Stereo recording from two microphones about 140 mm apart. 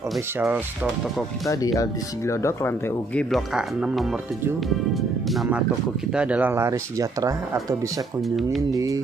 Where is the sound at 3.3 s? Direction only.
Centre (ahead or behind); by 9.0 s 25° right (ahead or behind).